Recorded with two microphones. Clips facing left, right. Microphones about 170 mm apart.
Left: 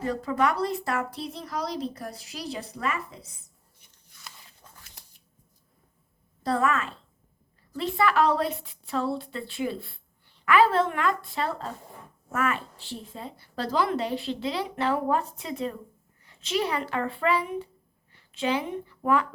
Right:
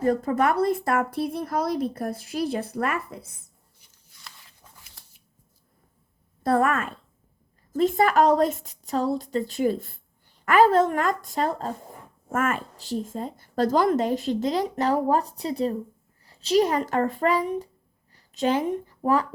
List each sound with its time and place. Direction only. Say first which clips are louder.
0.0 s a woman's voice: right 4 dB; 50° right (ahead or behind)
6.4 s a woman's voice: right 4 dB; 50° right (ahead or behind); by 19.3 s 35° right (ahead or behind)